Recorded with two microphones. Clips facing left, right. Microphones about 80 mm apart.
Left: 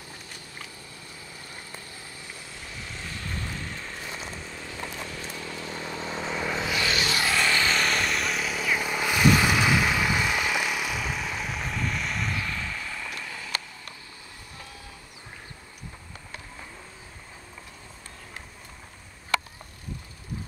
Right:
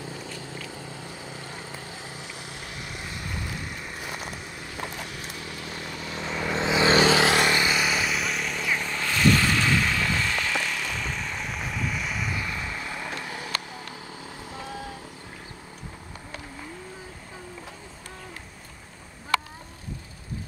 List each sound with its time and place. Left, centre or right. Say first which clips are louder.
0.5 s vehicle: right 6 dB; right
1.7 s vehicle: right 4 dB; right
2.7 s vehicle: even; centre
5.6 s vehicle: left 3 dB; left
6.3 s vehicle: right 3 dB; centre
6.6 s vehicle: right 11 dB; right
7.3 s vehicle: right 2 dB; centre